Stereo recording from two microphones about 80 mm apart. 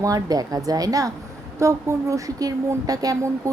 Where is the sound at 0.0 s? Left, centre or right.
Right.